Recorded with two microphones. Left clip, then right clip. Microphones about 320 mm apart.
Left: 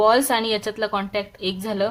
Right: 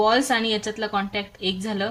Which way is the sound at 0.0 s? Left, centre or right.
Centre.